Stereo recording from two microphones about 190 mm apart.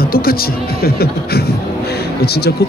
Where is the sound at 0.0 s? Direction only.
50° left (ahead or behind).